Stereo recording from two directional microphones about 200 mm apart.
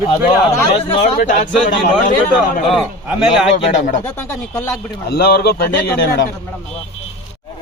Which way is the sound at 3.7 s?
35° left (ahead or behind).